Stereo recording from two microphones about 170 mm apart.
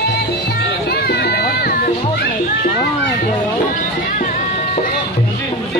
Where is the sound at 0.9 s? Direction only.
70° left (ahead or behind).